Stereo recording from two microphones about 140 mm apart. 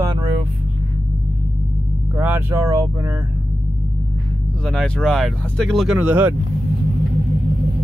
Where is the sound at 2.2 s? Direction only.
15° right (ahead or behind).